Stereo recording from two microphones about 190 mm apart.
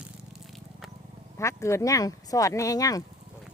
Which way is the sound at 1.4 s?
15° left (ahead or behind).